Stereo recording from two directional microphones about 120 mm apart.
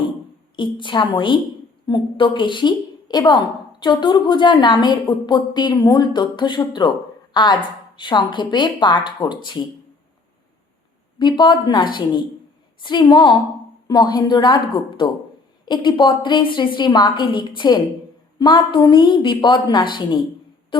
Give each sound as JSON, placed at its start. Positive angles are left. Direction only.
{"t": 0.5, "sound": "a woman's voice", "side_deg": 40}
{"t": 11.2, "sound": "a woman's voice", "side_deg": 40}